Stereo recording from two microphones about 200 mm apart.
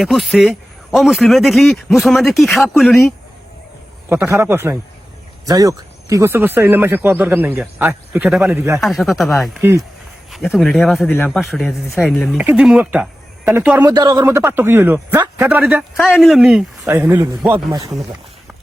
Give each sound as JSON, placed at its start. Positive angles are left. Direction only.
{"t": 0.0, "sound": "a man's voice", "side_deg": 0}
{"t": 4.1, "sound": "speech", "side_deg": -10}
{"t": 8.8, "sound": "a man's voice", "side_deg": 0}
{"t": 9.6, "sound": "speech", "side_deg": -10}
{"t": 10.3, "sound": "a man's voice", "side_deg": 0}
{"t": 13.9, "sound": "speech", "side_deg": -20}